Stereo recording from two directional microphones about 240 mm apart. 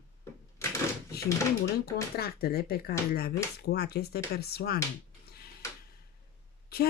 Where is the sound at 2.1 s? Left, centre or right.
Left.